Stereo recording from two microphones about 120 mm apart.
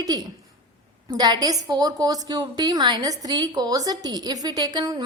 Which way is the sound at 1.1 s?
35° right (ahead or behind).